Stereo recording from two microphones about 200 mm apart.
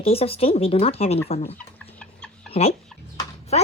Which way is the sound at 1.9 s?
5° left (ahead or behind).